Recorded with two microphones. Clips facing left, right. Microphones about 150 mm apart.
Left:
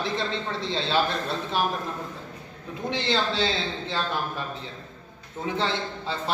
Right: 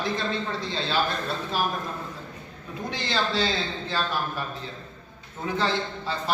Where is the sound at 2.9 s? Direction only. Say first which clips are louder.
Left 2 dB; 25° left (ahead or behind).